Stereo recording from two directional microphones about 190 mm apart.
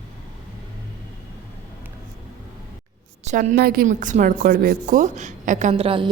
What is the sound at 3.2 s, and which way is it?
Speech, 40° right (ahead or behind).